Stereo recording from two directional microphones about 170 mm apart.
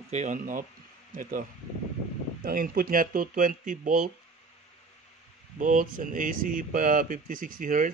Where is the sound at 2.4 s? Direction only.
60° right (ahead or behind).